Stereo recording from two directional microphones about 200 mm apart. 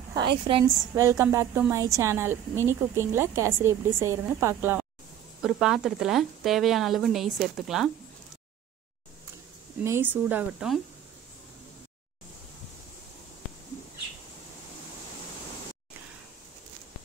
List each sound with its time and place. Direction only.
0.1 s a woman's voice: 25° right (ahead or behind); by 7.9 s centre (ahead or behind)
9.8 s a woman's voice: 10° right (ahead or behind)